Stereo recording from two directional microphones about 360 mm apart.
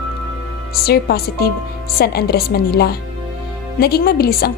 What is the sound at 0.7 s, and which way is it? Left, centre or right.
A woman's voice, left.